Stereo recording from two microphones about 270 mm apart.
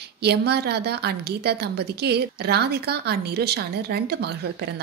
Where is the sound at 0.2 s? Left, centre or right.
Right.